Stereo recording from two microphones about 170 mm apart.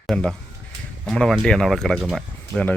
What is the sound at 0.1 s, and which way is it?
Speech, 5° left (ahead or behind).